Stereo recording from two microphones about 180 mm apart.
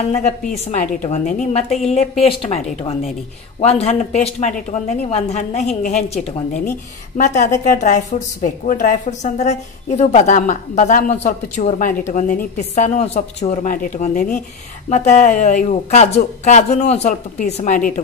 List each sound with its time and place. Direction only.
0.7 s a woman's voice: 40° left (ahead or behind)